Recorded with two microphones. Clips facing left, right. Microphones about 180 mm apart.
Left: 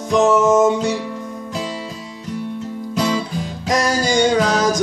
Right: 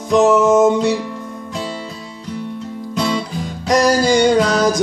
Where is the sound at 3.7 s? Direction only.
Centre (ahead or behind).